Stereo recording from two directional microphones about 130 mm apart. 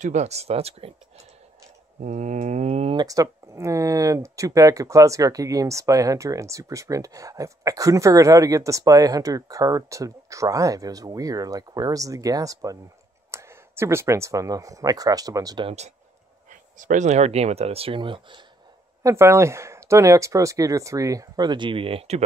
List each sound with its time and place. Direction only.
0.0 s speech: 65° right (ahead or behind)
2.0 s speech: 65° right (ahead or behind)
2.9 s speech: 30° right (ahead or behind)
15.6 s speech: 55° right (ahead or behind)
16.4 s speech: 80° right; by 18.4 s 40° right (ahead or behind)
19.0 s speech: 20° right (ahead or behind); by 22.2 s 50° right (ahead or behind)